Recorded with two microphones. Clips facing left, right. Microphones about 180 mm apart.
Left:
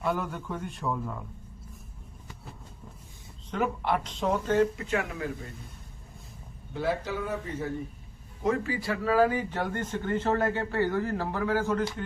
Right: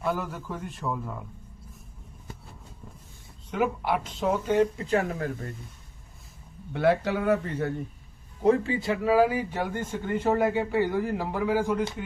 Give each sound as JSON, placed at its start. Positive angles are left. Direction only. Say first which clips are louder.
{"t": 0.0, "sound": "a man's voice", "louder": "even", "side_deg": 0}
{"t": 3.5, "sound": "a man's voice", "louder": "right 2 dB", "side_deg": -5}
{"t": 4.6, "sound": "speech", "louder": "right 3 dB", "side_deg": -35}
{"t": 6.7, "sound": "speech", "louder": "right 6 dB", "side_deg": -65}
{"t": 8.4, "sound": "a man's voice", "louder": "right 5 dB", "side_deg": -25}